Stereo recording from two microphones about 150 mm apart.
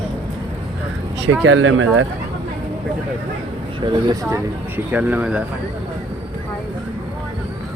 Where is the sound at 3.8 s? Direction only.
25° right (ahead or behind).